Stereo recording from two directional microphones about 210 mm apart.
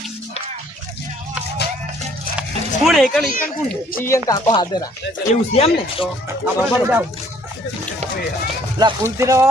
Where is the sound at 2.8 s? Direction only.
Centre (ahead or behind).